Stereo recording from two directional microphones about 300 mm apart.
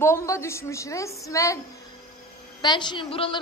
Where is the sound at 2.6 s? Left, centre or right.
Centre.